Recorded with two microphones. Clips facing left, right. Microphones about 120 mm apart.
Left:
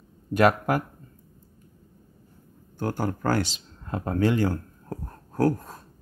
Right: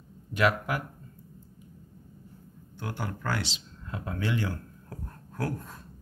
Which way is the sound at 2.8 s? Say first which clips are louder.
Left 8 dB; 40° left (ahead or behind).